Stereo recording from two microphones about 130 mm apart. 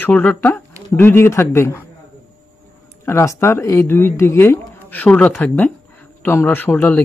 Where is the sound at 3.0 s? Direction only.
20° left (ahead or behind).